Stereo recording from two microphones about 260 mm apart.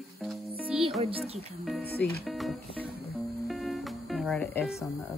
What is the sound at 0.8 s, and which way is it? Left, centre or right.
Music, right.